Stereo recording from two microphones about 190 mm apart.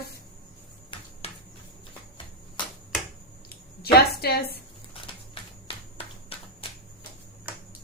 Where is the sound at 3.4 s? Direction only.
55° left (ahead or behind).